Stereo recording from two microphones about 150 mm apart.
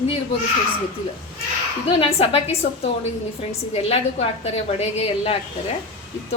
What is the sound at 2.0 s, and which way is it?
A woman's voice, 40° left (ahead or behind).